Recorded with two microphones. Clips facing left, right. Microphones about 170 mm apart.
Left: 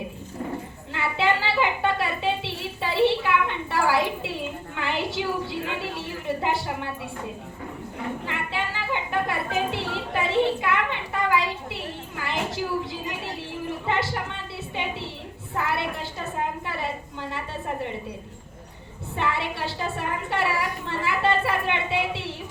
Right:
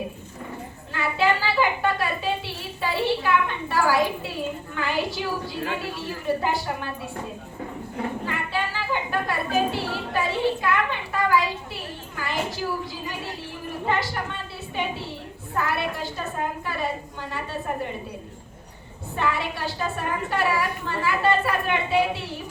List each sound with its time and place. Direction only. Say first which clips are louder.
0.9 s a sound: right 1 dB; 25° left (ahead or behind)
4.8 s a woman's voice: right 1 dB; 25° left (ahead or behind)
8.3 s a woman's voice: right 2 dB; 20° left (ahead or behind)
15.5 s a woman's voice: right 1 dB; 25° left (ahead or behind)
19.1 s a woman's voice: right 1 dB; 25° left (ahead or behind)